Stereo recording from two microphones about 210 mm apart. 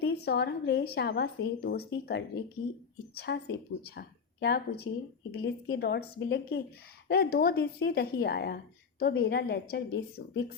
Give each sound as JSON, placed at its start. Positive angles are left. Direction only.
{"t": 0.0, "sound": "a woman's voice", "side_deg": 50}